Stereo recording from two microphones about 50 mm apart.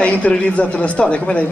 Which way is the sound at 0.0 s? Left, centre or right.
Left.